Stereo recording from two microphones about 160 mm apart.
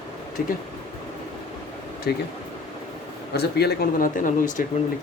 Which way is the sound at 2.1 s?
75° left (ahead or behind).